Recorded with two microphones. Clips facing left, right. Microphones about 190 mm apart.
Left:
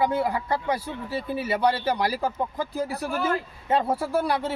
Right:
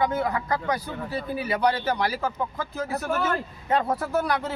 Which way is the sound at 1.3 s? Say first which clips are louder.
Left 1 dB; 5° left (ahead or behind).